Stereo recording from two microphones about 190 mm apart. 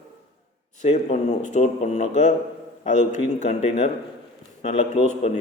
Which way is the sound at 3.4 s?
35° left (ahead or behind).